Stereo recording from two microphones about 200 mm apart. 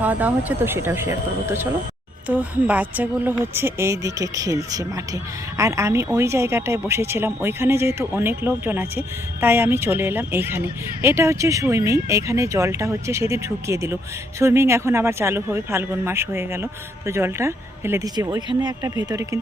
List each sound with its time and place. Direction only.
0.0 s speech: 10° right (ahead or behind)